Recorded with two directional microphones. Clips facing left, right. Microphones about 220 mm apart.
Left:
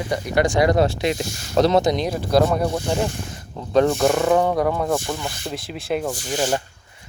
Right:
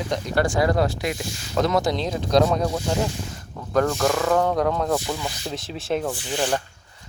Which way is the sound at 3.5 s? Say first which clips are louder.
Left 4 dB; 25° left (ahead or behind).